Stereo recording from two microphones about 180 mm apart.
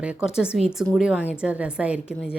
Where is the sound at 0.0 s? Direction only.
5° right (ahead or behind).